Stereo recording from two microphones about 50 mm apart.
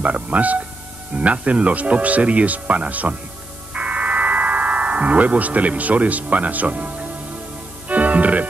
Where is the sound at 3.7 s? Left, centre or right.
Right.